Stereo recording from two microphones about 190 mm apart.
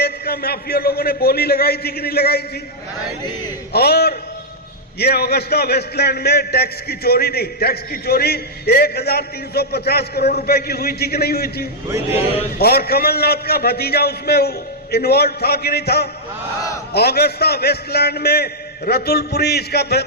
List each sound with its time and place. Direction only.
0.0 s a man's voice: 55° left (ahead or behind)
3.7 s a man's voice: 55° left (ahead or behind)
11.9 s a man's voice: 15° right (ahead or behind)
12.5 s a man's voice: 55° left (ahead or behind)